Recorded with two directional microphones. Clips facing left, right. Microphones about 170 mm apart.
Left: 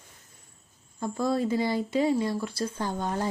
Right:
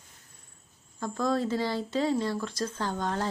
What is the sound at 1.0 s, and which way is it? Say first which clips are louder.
Speech: left 1 dB; 10° left (ahead or behind).